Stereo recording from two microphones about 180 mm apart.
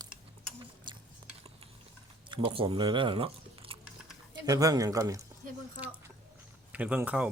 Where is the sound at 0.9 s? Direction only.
25° right (ahead or behind).